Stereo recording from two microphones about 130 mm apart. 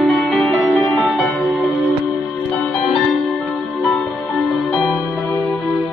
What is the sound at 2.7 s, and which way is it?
Music, centre (ahead or behind).